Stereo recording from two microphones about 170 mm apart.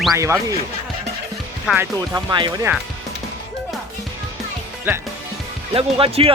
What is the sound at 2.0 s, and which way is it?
Speech, 20° right (ahead or behind).